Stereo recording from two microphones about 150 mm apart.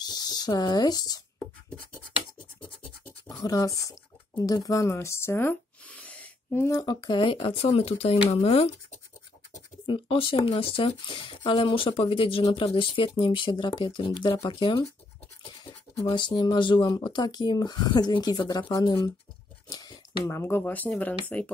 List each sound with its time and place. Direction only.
0.0 s a sound: 25° left (ahead or behind)
2.6 s scratch: 15° left (ahead or behind)
3.4 s speech: 20° left (ahead or behind); by 8.6 s 45° left (ahead or behind)
9.8 s speech: 35° left (ahead or behind)
16.1 s speech: 30° left (ahead or behind); by 21.5 s 10° left (ahead or behind)